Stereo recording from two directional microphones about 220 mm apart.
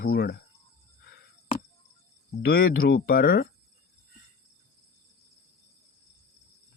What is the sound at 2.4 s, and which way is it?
Speech, 45° left (ahead or behind).